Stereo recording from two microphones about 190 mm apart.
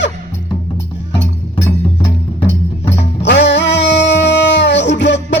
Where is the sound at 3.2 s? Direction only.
65° left (ahead or behind).